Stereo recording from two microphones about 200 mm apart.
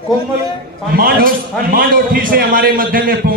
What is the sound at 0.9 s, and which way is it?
A man's voice, 45° right (ahead or behind).